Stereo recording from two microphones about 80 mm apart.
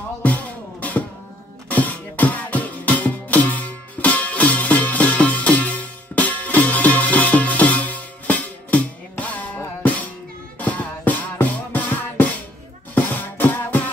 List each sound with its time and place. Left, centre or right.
0.2 s music: centre
10.6 s music: centre